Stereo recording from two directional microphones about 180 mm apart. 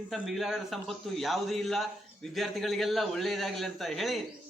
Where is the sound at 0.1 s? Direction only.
Centre (ahead or behind).